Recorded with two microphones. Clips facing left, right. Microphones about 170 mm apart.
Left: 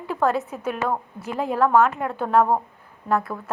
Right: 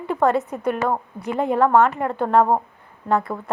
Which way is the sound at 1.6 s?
20° right (ahead or behind).